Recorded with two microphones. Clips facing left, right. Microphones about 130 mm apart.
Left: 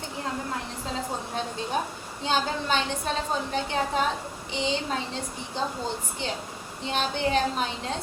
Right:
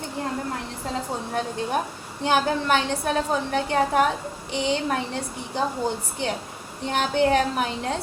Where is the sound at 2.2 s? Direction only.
60° right (ahead or behind).